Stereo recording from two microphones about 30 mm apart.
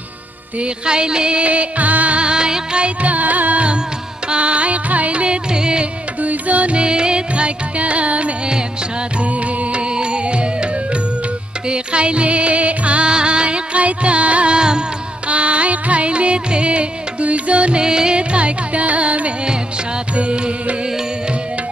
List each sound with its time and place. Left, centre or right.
0.8 s music: right
1.4 s music: right
2.1 s music: right
3.0 s music: right
3.5 s music: right
6.2 s music: right
6.8 s music: right
13.1 s music: right
14.5 s music: right
15.2 s music: right
17.8 s music: right
18.3 s carnatic music: right
20.2 s music: right